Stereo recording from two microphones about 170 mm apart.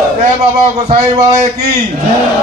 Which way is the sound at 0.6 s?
40° right (ahead or behind).